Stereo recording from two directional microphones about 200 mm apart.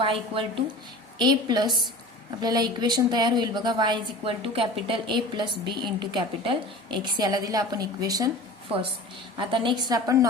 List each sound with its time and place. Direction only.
0.0 s a woman's voice: 25° right (ahead or behind)
9.4 s a woman's voice: 25° right (ahead or behind)